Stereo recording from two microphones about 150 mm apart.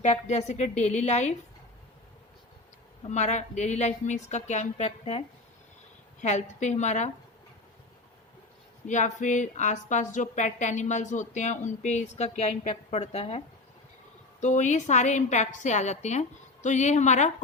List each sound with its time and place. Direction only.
0.0 s a woman's voice: 50° left (ahead or behind)
3.0 s a woman's voice: 50° left (ahead or behind)
6.2 s a woman's voice: 50° left (ahead or behind)
8.9 s a woman's voice: 55° left (ahead or behind)
14.4 s a woman's voice: 55° left (ahead or behind)